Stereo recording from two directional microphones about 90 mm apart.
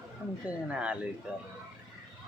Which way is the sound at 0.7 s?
15° right (ahead or behind).